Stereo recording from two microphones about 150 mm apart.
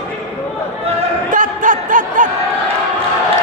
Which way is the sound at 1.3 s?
60° right (ahead or behind).